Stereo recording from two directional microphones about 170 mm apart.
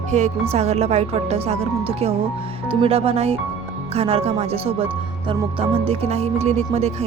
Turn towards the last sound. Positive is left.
turn(degrees=-40)  # may be behind; listen again after turning